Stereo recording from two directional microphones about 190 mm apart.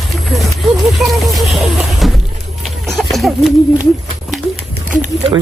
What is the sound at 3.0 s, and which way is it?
Speech, centre (ahead or behind).